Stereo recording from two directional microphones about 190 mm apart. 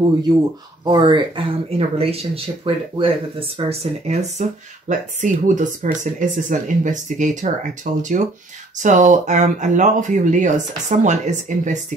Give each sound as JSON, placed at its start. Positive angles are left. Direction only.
{"t": 0.8, "sound": "speech", "side_deg": -25}